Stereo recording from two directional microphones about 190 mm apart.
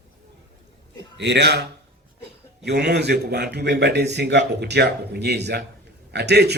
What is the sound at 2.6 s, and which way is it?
A man's voice, 60° right (ahead or behind).